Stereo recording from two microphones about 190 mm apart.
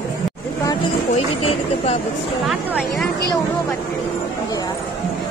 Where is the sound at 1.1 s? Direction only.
35° left (ahead or behind).